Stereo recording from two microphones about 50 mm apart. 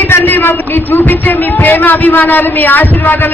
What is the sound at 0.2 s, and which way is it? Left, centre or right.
A man's voice, left.